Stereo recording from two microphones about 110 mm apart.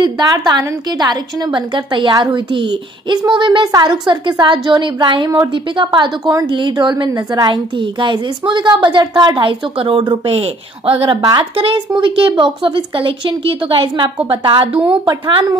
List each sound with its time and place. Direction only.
0.0 s a woman's voice: 40° right (ahead or behind)
2.1 s a woman's voice: 30° right (ahead or behind)
2.5 s a woman's voice: 45° right (ahead or behind)